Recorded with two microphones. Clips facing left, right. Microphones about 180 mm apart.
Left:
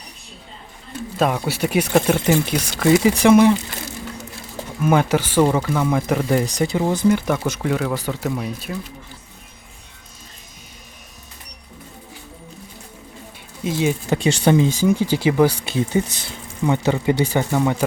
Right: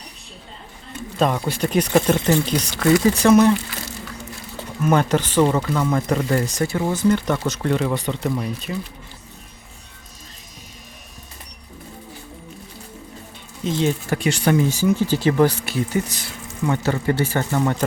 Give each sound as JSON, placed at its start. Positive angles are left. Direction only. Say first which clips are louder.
{"t": 1.2, "sound": "speech", "louder": "even", "side_deg": 5}
{"t": 4.8, "sound": "speech", "louder": "left 1 dB", "side_deg": 10}
{"t": 13.7, "sound": "speech", "louder": "even", "side_deg": 10}
{"t": 14.1, "sound": "speech", "louder": "left 6 dB", "side_deg": 30}
{"t": 15.6, "sound": "speech", "louder": "left 2 dB", "side_deg": 25}